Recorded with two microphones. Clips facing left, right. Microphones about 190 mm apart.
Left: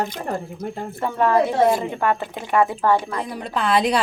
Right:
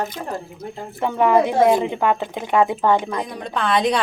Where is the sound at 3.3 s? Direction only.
5° left (ahead or behind).